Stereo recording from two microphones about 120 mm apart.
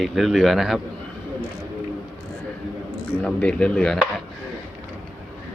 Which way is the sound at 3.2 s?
10° left (ahead or behind).